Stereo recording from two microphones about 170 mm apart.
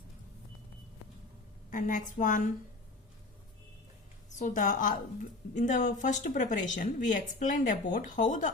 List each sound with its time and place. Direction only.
1.7 s a woman's voice: 50° left (ahead or behind)
4.3 s a woman's voice: 45° left (ahead or behind)